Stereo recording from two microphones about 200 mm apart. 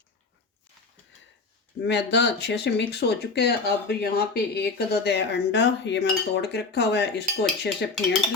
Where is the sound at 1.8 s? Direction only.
60° left (ahead or behind).